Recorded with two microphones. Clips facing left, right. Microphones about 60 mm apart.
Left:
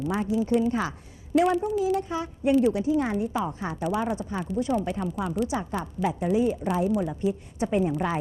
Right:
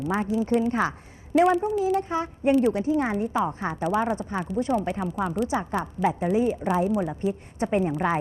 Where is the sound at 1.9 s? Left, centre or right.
Right.